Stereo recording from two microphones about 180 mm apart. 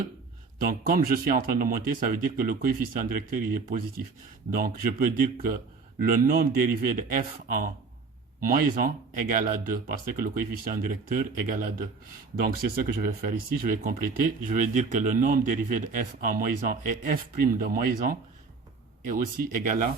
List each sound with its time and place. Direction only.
0.6 s speech: 50° right (ahead or behind)
8.4 s speech: 50° right (ahead or behind)
12.6 s speech: 55° right (ahead or behind)